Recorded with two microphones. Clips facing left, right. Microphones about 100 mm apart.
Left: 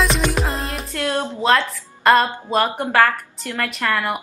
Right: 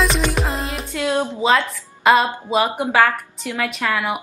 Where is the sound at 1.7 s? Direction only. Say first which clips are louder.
Even; centre (ahead or behind).